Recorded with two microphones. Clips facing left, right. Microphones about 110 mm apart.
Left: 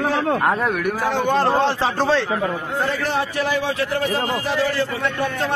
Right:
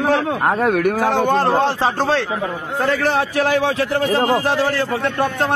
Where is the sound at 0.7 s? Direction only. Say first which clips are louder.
Right 5 dB; 80° right.